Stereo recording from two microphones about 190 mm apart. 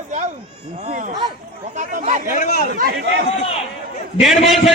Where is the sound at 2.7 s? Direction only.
55° right (ahead or behind).